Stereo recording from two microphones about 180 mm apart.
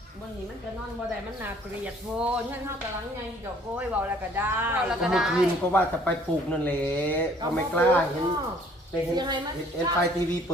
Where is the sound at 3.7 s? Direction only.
10° right (ahead or behind).